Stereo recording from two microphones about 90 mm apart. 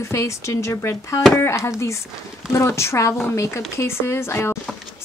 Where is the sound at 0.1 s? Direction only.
35° left (ahead or behind).